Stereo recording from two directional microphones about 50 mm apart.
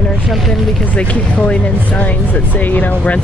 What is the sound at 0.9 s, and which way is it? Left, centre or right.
A woman's voice, left.